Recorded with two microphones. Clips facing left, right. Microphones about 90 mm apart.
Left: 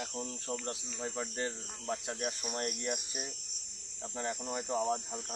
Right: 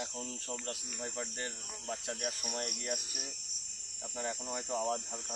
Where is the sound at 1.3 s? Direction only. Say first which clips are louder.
Left 5 dB; 25° left (ahead or behind).